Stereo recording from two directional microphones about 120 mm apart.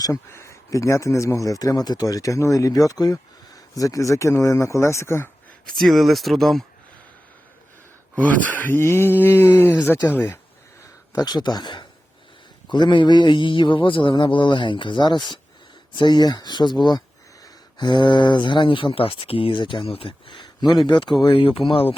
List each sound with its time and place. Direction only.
0.0 s speech: 25° left (ahead or behind)
5.6 s speech: centre (ahead or behind)
8.1 s speech: 15° left (ahead or behind)
11.1 s speech: 30° left (ahead or behind); by 21.8 s 50° left (ahead or behind)